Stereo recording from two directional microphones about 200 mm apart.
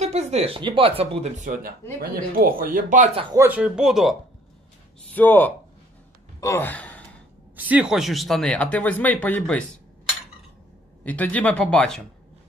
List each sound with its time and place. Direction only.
0.0 s speech: 30° right (ahead or behind)
3.3 s speech: 10° right (ahead or behind); by 7.0 s 10° left (ahead or behind)
7.5 s speech: 10° right (ahead or behind)
11.1 s speech: 5° left (ahead or behind)